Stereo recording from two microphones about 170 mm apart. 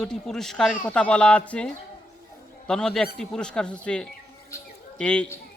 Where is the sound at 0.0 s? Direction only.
5° left (ahead or behind).